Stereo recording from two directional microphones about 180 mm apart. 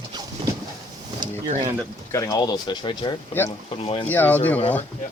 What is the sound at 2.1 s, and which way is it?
Speech, 20° left (ahead or behind).